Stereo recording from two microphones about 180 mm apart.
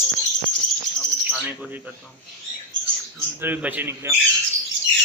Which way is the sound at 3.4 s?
10° right (ahead or behind).